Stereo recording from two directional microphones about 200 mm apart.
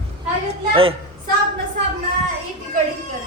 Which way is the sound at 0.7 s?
30° right (ahead or behind).